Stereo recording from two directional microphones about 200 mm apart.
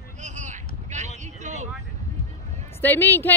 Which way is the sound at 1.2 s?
35° right (ahead or behind).